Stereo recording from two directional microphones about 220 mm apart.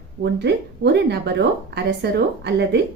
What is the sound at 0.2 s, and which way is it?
Speech, 50° right (ahead or behind).